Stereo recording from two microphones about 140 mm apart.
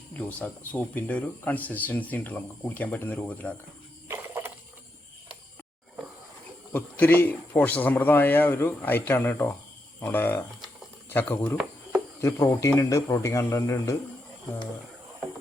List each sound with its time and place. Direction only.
0.2 s speech: 10° left (ahead or behind)
4.1 s a sound: 15° right (ahead or behind)
6.7 s a man's voice: 15° left (ahead or behind)